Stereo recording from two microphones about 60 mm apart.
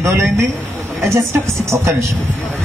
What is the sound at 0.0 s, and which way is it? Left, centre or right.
A man's voice, right.